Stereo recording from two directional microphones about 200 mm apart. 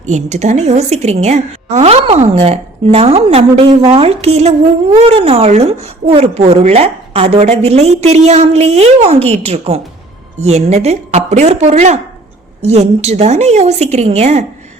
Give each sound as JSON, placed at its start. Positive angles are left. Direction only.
{"t": 0.0, "sound": "a woman's voice", "side_deg": -35}